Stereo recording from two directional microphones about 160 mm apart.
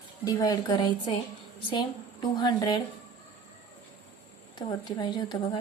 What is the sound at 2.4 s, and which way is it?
Speech, 25° left (ahead or behind).